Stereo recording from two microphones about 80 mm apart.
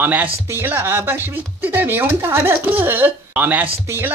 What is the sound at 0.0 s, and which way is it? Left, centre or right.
Speech, right.